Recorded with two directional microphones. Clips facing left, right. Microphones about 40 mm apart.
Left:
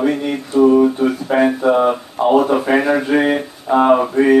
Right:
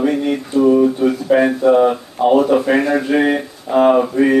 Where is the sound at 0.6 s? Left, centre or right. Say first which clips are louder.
Even; centre.